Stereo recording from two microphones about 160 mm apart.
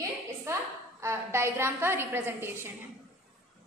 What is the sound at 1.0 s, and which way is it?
A woman's voice, 15° right (ahead or behind).